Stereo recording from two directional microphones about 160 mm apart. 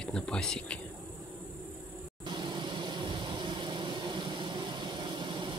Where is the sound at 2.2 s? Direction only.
30° right (ahead or behind).